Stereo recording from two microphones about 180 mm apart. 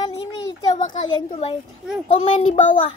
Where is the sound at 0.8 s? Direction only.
45° left (ahead or behind).